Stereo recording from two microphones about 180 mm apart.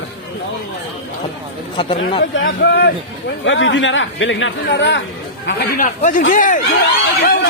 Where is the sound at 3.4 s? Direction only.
90° left.